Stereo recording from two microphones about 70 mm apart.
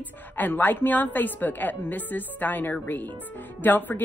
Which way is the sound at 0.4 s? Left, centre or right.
Left.